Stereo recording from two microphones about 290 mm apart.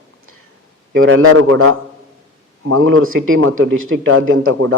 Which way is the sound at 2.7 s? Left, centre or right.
Right.